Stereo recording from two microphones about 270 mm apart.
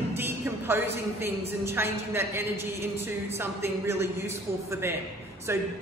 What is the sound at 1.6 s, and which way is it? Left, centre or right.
A woman's voice, centre.